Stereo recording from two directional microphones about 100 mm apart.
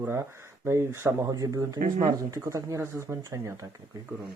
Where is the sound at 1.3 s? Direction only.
40° right (ahead or behind).